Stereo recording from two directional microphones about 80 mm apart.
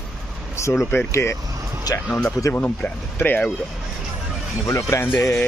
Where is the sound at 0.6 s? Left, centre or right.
Left.